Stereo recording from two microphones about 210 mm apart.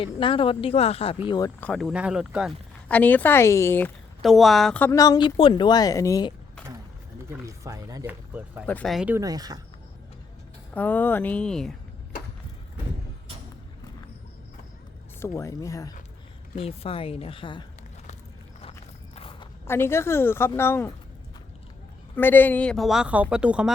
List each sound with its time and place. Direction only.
0.0 s a woman's voice: 25° left (ahead or behind)
1.6 s speech: 5° left (ahead or behind)
2.9 s a woman's voice: 5° left (ahead or behind)
7.4 s speech: 15° right (ahead or behind)
8.6 s speech: 5° left (ahead or behind); by 9.6 s 20° right (ahead or behind)
10.8 s a woman's voice: 10° left (ahead or behind)
15.2 s a woman's voice: 15° left (ahead or behind)
16.6 s a woman's voice: 25° left (ahead or behind)
19.1 s walk: 25° left (ahead or behind)
19.6 s a woman's voice: 10° left (ahead or behind)
22.1 s speech: 10° left (ahead or behind)